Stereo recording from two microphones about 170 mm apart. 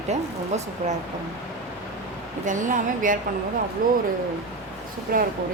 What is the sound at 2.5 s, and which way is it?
A woman's voice, 50° right (ahead or behind).